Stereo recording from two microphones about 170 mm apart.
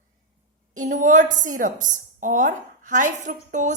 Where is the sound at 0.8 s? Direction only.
45° right (ahead or behind).